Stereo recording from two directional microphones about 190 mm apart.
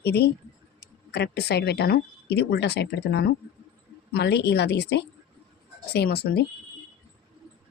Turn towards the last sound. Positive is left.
turn(degrees=60)  # may be behind; listen again after turning